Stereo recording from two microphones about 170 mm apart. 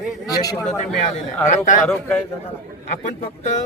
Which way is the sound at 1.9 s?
10° left (ahead or behind).